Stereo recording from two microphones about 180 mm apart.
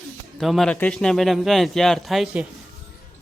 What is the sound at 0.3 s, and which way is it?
A man's voice, centre (ahead or behind).